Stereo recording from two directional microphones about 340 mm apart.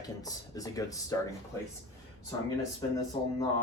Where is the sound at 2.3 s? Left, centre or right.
Centre.